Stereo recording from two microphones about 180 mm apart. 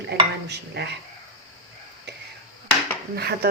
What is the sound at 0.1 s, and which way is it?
Stir, 70° right (ahead or behind).